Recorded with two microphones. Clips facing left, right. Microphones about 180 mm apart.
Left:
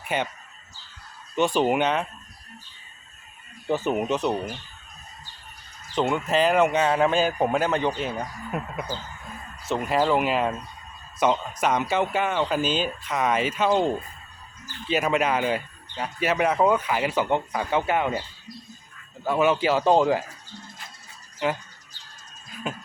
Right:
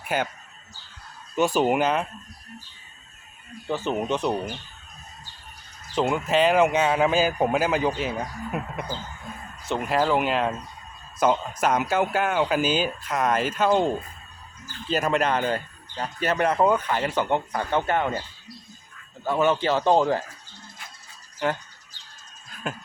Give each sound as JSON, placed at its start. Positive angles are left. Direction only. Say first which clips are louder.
{"t": 0.1, "sound": "speech", "louder": "right 1 dB", "side_deg": -5}
{"t": 1.4, "sound": "speech", "louder": "even", "side_deg": -5}
{"t": 3.7, "sound": "speech", "louder": "left 3 dB", "side_deg": 15}
{"t": 3.9, "sound": "speech", "louder": "left 1 dB", "side_deg": 5}
{"t": 5.9, "sound": "speech", "louder": "right 1 dB", "side_deg": 0}
{"t": 19.2, "sound": "speech", "louder": "left 1 dB", "side_deg": 5}
{"t": 22.6, "sound": "speech", "louder": "even", "side_deg": 0}